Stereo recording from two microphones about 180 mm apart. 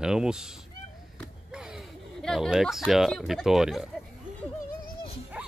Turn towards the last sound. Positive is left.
turn(degrees=-5)  # may be behind; listen again after turning